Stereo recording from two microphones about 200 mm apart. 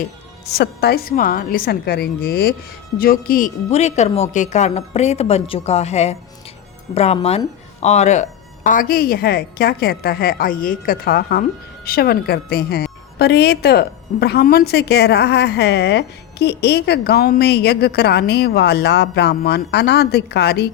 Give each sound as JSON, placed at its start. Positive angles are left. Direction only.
{"t": 0.5, "sound": "a woman's voice", "side_deg": 55}